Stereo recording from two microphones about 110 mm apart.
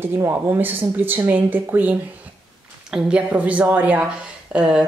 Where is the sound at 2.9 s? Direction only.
10° right (ahead or behind).